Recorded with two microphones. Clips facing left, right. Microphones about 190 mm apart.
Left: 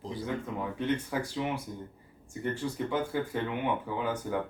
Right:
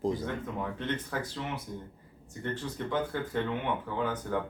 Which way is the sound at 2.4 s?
10° left (ahead or behind).